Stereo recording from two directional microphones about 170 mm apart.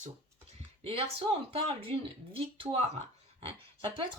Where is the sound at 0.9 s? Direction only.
35° right (ahead or behind).